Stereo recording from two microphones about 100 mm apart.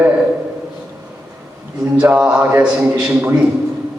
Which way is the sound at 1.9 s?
10° right (ahead or behind).